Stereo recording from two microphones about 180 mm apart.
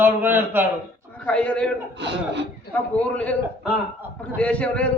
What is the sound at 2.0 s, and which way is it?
Speech, 75° right (ahead or behind).